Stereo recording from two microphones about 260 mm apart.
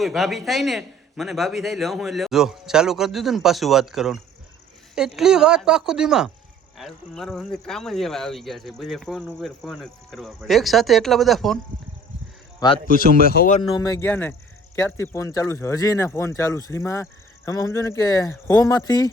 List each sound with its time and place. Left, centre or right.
0.0 s speech: centre
12.5 s a man's voice: centre
12.9 s speech: left
13.6 s speech: centre